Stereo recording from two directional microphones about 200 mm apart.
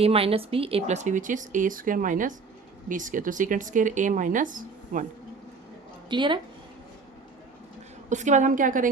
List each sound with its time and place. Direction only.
0.0 s speech: 30° right (ahead or behind)
6.1 s a woman's voice: 25° right (ahead or behind)
8.1 s speech: 35° right (ahead or behind)